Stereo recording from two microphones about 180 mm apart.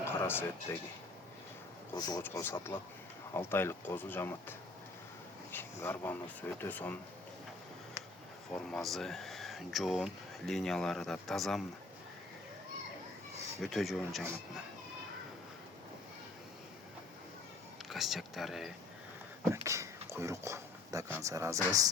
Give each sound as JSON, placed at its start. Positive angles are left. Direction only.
{"t": 0.0, "sound": "speech", "side_deg": 10}
{"t": 2.0, "sound": "speech", "side_deg": 20}
{"t": 8.5, "sound": "speech", "side_deg": 0}
{"t": 13.6, "sound": "speech", "side_deg": 0}
{"t": 17.8, "sound": "speech", "side_deg": 0}
{"t": 19.5, "sound": "speech", "side_deg": -15}